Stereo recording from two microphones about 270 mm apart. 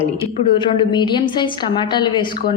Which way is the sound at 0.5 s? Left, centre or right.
Centre.